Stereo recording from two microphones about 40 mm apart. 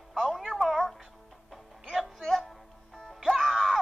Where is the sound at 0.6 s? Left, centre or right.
Centre.